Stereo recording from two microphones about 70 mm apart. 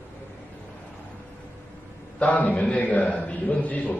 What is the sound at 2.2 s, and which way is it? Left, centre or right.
A man's voice, left.